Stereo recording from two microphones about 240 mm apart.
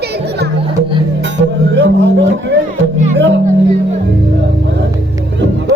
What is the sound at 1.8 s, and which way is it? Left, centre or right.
Speech, right.